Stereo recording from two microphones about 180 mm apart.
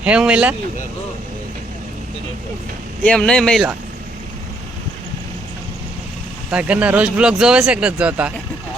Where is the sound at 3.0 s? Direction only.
5° left (ahead or behind).